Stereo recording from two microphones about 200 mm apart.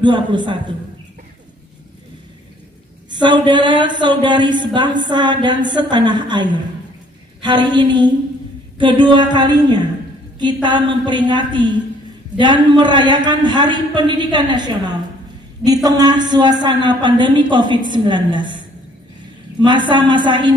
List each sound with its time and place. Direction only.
0.0 s a woman's voice: 25° right (ahead or behind)
3.1 s a woman's voice: 20° right (ahead or behind)
19.9 s a woman's voice: 20° right (ahead or behind)